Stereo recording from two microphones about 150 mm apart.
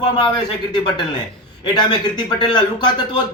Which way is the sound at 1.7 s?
30° left (ahead or behind).